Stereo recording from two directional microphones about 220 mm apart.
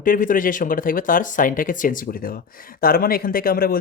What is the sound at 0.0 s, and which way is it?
Speech, 40° left (ahead or behind).